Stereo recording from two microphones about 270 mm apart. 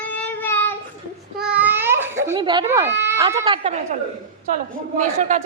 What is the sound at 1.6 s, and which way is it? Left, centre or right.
Cat, centre.